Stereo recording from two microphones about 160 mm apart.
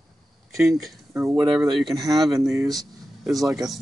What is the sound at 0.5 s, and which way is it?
Speech, centre (ahead or behind).